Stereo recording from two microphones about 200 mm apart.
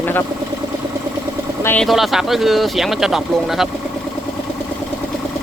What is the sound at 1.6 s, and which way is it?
Speech, 10° left (ahead or behind).